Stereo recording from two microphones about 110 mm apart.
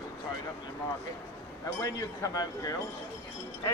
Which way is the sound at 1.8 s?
30° left (ahead or behind).